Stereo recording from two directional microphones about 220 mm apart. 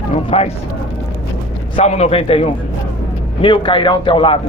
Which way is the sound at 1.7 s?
30° left (ahead or behind).